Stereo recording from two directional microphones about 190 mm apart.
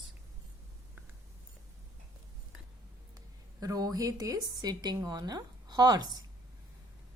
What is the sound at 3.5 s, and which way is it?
A woman's voice, 20° right (ahead or behind).